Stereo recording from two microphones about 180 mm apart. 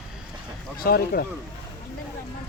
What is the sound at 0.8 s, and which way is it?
Speech, 60° left (ahead or behind).